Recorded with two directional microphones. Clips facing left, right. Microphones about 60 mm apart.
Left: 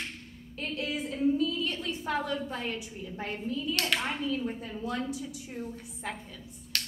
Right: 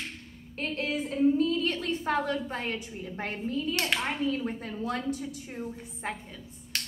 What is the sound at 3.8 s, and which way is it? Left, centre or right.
Speech, right.